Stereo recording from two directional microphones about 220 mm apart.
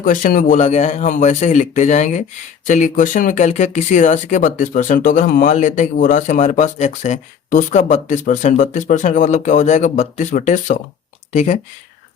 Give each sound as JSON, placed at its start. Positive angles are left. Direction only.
{"t": 0.0, "sound": "speech", "side_deg": 35}